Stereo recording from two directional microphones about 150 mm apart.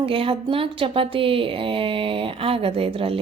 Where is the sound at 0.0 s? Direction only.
40° right (ahead or behind).